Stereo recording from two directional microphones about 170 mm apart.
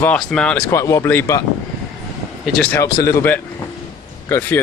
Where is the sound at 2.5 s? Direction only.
5° left (ahead or behind).